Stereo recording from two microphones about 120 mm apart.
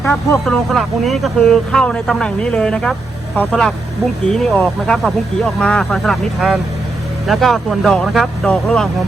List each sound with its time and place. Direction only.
0.0 s speech: 20° left (ahead or behind)
0.4 s speech: centre (ahead or behind)